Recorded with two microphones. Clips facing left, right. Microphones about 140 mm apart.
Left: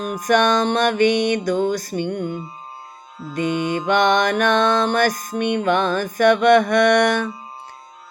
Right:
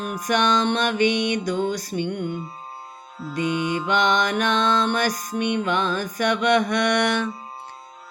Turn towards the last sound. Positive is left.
turn(degrees=45)  # may be behind; listen again after turning